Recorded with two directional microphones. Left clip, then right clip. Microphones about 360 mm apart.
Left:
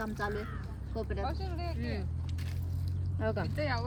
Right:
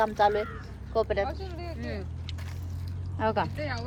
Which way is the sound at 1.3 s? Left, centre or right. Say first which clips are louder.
Right 2 dB; centre.